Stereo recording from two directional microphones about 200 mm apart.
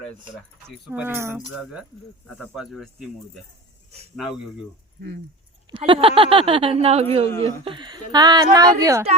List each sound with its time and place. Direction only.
0.9 s speech: 10° right (ahead or behind)
2.2 s speech: centre (ahead or behind)
4.9 s speech: 55° right (ahead or behind)
5.7 s speech: 25° right (ahead or behind)